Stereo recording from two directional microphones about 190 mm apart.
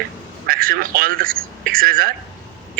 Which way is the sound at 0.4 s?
50° right (ahead or behind).